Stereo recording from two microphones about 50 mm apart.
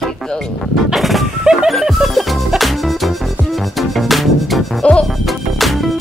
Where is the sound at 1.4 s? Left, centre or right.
Centre.